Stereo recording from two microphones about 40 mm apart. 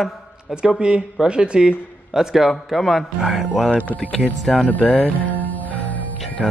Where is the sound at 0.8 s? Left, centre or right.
Right; by 3.6 s centre.